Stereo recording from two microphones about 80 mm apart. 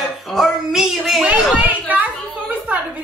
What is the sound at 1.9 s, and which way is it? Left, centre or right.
Speech, centre.